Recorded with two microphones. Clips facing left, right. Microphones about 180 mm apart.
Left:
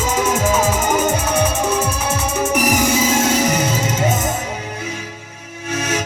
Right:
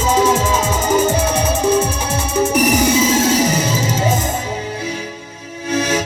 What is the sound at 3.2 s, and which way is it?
Music, 30° right (ahead or behind).